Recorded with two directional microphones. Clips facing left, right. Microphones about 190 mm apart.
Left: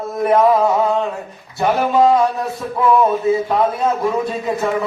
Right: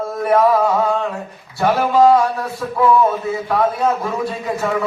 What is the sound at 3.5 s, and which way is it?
Speech, 20° left (ahead or behind).